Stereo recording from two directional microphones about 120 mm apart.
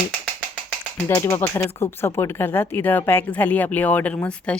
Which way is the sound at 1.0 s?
25° left (ahead or behind).